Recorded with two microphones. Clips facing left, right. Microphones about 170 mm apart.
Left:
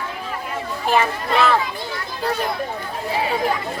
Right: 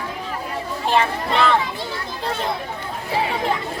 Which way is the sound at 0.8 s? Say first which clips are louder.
Even; 25° right (ahead or behind).